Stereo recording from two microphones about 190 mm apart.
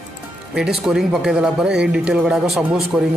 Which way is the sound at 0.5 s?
Centre (ahead or behind).